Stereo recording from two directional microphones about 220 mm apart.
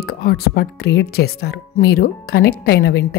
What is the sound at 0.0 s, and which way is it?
Speech, 45° left (ahead or behind).